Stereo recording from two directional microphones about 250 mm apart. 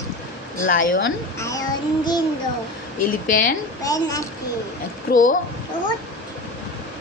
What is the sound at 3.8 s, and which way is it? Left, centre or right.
Child singing, centre.